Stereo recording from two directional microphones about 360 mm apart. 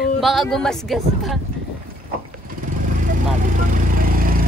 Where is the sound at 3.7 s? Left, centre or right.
Right.